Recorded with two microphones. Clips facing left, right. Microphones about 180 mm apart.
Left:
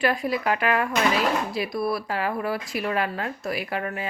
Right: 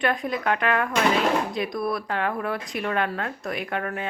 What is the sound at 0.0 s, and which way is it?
Speech, 5° left (ahead or behind).